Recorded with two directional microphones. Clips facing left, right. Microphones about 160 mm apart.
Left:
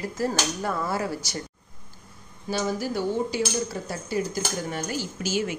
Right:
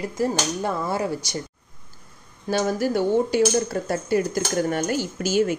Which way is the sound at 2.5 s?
55° right (ahead or behind).